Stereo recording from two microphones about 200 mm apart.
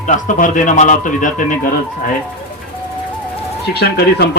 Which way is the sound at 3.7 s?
55° left (ahead or behind).